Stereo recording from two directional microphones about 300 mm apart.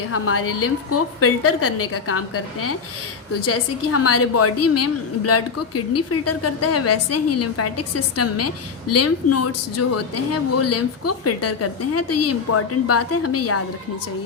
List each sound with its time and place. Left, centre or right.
0.1 s a woman's voice: left